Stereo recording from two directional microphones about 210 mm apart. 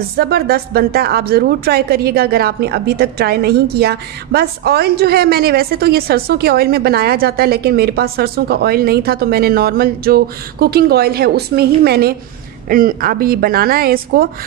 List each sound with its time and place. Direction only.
0.2 s a woman's voice: 50° right (ahead or behind)